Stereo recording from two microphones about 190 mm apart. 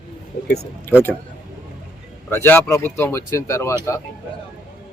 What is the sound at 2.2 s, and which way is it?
A man's voice, 10° left (ahead or behind).